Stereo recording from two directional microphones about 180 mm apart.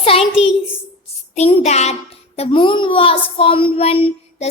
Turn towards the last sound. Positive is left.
turn(degrees=30)  # may be behind; listen again after turning